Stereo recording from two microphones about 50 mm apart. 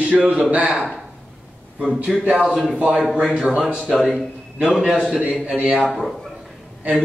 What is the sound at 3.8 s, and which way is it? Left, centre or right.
A man's voice, centre.